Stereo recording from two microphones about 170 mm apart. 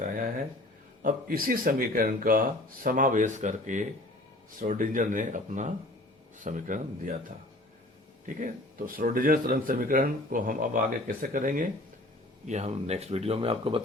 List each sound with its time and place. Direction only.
0.1 s a sound: 50° right (ahead or behind)
1.0 s speech: 55° right (ahead or behind)
8.9 s speech: 55° right (ahead or behind)
12.5 s speech: 40° right (ahead or behind)